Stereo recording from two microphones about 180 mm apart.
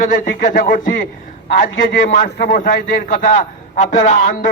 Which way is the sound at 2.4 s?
55° left (ahead or behind).